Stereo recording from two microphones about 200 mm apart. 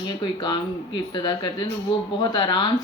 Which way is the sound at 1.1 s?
20° left (ahead or behind).